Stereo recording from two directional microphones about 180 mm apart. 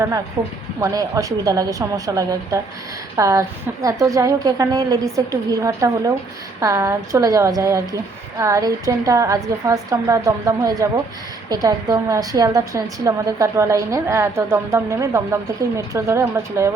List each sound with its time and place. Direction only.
0.4 s a woman's voice: 15° right (ahead or behind)